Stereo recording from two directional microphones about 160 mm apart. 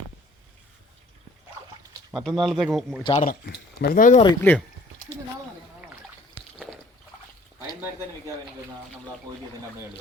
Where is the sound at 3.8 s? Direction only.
60° left (ahead or behind).